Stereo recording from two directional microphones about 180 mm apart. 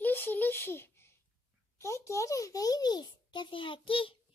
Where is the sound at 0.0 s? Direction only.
10° left (ahead or behind).